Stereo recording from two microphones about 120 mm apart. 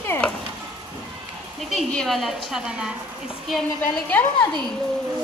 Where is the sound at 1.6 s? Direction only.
Centre (ahead or behind).